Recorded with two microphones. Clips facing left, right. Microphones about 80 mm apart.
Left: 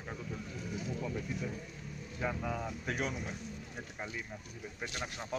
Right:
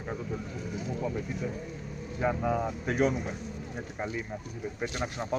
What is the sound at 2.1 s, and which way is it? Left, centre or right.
Speech, right.